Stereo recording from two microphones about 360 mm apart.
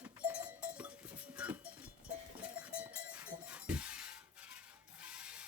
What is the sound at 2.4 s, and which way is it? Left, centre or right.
Goat, centre.